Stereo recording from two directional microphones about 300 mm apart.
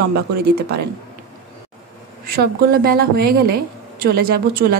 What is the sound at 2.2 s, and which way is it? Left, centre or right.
Speech, right.